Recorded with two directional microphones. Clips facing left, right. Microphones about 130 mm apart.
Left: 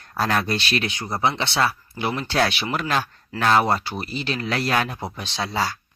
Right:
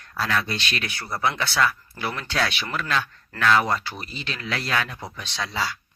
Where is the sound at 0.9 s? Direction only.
20° left (ahead or behind).